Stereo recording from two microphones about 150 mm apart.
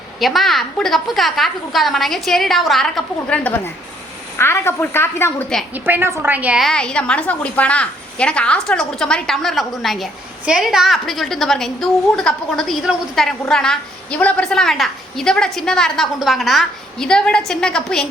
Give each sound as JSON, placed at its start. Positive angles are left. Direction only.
{"t": 0.2, "sound": "a woman's voice", "side_deg": 0}
{"t": 5.7, "sound": "a woman's voice", "side_deg": -15}